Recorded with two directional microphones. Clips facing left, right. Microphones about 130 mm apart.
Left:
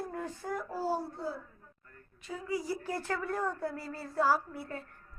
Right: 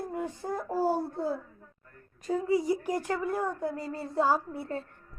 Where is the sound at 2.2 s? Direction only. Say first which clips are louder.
Right 11 dB; 40° right (ahead or behind).